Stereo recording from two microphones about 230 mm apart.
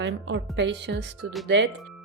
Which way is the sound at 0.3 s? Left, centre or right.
Right.